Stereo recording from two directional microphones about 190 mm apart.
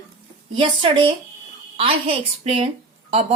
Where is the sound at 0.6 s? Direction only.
25° right (ahead or behind).